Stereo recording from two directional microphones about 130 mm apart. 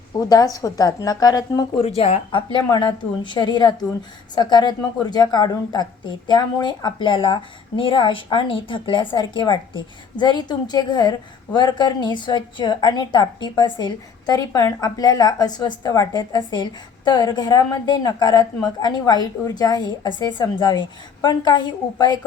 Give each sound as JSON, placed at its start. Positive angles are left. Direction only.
{"t": 0.2, "sound": "speech", "side_deg": 30}
{"t": 1.8, "sound": "speech", "side_deg": 50}
{"t": 2.3, "sound": "speech", "side_deg": 40}